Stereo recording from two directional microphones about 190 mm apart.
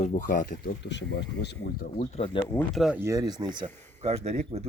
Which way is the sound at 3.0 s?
20° right (ahead or behind).